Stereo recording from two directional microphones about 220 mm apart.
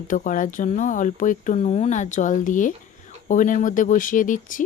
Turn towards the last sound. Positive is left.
turn(degrees=35)  # may be behind; listen again after turning